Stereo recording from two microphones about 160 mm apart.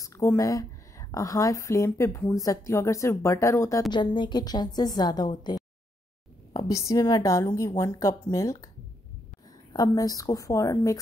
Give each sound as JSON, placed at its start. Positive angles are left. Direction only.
{"t": 0.0, "sound": "speech", "side_deg": 20}
{"t": 3.9, "sound": "speech", "side_deg": 30}
{"t": 9.7, "sound": "speech", "side_deg": 20}